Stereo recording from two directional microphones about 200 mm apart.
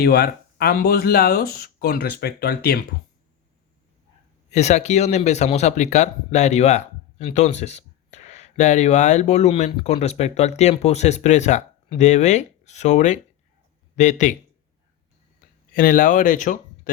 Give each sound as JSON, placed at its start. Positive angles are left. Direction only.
{"t": 0.0, "sound": "speech", "side_deg": 50}
{"t": 4.5, "sound": "speech", "side_deg": 35}
{"t": 15.7, "sound": "speech", "side_deg": 45}